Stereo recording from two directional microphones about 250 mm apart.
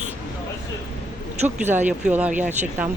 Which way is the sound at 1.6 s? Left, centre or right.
Centre.